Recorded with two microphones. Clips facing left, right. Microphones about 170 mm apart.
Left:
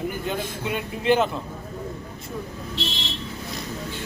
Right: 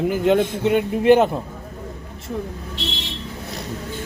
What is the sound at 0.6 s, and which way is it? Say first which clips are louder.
Speech: right 8 dB; 65° right (ahead or behind).